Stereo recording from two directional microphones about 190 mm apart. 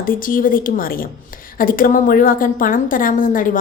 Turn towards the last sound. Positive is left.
turn(degrees=45)  # may be behind; listen again after turning